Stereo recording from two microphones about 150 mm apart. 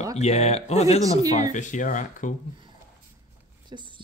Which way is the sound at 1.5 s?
55° left (ahead or behind).